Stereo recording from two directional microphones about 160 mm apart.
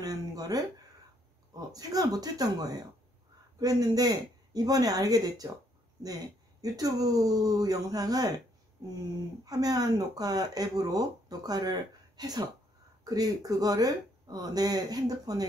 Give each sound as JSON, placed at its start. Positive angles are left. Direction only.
{"t": 0.0, "sound": "a sound", "side_deg": -25}
{"t": 1.7, "sound": "speech", "side_deg": -25}
{"t": 6.6, "sound": "speech", "side_deg": -25}
{"t": 9.4, "sound": "speech", "side_deg": -25}